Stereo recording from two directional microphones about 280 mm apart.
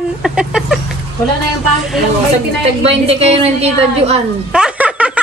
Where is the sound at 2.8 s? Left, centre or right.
Right.